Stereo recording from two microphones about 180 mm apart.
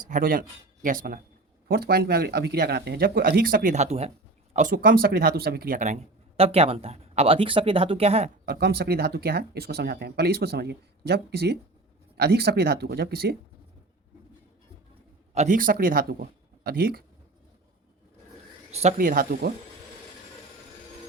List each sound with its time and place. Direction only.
0.1 s speech: 50° right (ahead or behind); by 4.1 s 35° right (ahead or behind)
4.5 s speech: 50° right (ahead or behind)
8.4 s speech: 60° right (ahead or behind)
15.4 s speech: 45° right (ahead or behind)
18.7 s speech: 35° right (ahead or behind)
18.9 s speech: 50° right (ahead or behind)